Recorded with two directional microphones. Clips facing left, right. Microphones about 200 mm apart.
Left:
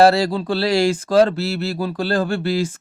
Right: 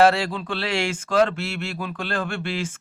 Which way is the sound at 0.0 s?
35° left (ahead or behind).